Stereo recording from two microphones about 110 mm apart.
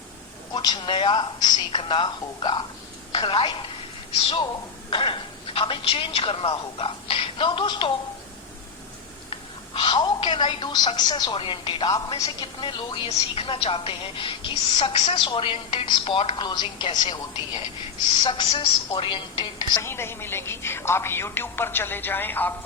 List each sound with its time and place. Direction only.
0.5 s a woman's voice: 40° left (ahead or behind)
9.7 s a woman's voice: 45° left (ahead or behind)
11.9 s a woman's voice: 35° left (ahead or behind)
12.5 s a woman's voice: 50° left (ahead or behind)
16.4 s a woman's voice: 40° left (ahead or behind)
18.2 s a woman's voice: 50° left (ahead or behind)
19.8 s speech: 20° left (ahead or behind)